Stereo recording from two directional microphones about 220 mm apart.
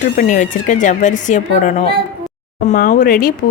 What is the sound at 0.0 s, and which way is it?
Speech, 35° left (ahead or behind).